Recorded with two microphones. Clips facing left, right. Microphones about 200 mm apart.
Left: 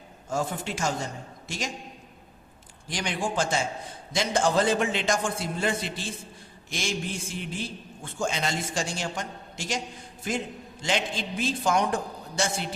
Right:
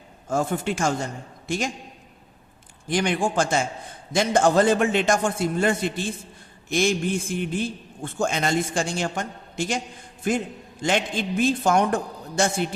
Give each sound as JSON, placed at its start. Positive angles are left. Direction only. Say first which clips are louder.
{"t": 0.3, "sound": "a man's voice", "louder": "right 5 dB", "side_deg": -55}
{"t": 2.9, "sound": "a man's voice", "louder": "right 7 dB", "side_deg": -55}